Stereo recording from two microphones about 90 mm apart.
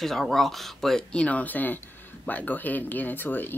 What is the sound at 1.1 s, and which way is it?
Speech, 15° left (ahead or behind).